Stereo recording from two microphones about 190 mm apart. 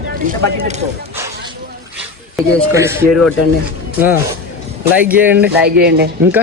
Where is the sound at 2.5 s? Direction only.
15° right (ahead or behind).